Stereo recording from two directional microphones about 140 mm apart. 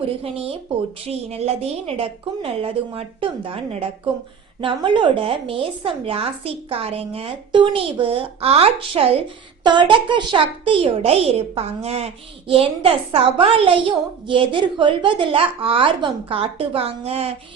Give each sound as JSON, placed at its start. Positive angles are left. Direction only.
{"t": 0.2, "sound": "a child's voice", "side_deg": -45}